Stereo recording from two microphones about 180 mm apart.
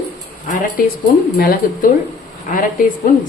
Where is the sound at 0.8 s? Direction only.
55° left (ahead or behind).